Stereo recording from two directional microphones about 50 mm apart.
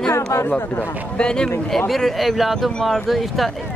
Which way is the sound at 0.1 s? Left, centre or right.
Left.